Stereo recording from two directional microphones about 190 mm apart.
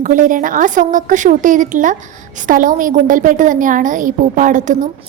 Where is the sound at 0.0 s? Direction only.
45° right (ahead or behind).